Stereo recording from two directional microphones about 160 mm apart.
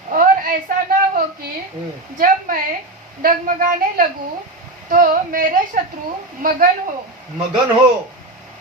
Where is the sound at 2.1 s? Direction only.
60° right (ahead or behind).